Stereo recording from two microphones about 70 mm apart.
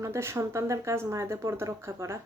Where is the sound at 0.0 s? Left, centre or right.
Right.